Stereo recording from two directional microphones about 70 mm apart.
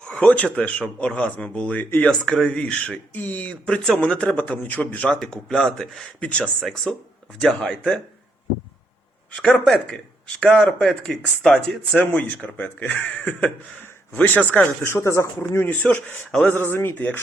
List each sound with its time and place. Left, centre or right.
0.0 s speech: centre
2.0 s speech: centre
5.3 s speech: centre
6.1 s speech: centre
9.3 s speech: centre
12.5 s speech: left
14.8 s speech: left
15.6 s speech: left